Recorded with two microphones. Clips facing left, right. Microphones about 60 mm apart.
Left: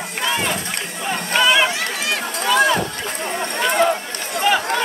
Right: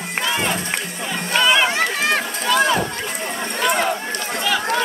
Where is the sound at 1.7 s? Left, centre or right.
Right.